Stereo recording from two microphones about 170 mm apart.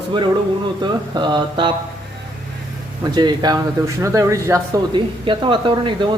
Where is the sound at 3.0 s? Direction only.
25° right (ahead or behind).